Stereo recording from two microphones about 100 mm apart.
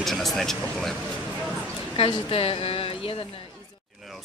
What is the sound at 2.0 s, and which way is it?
Speech, 70° left (ahead or behind).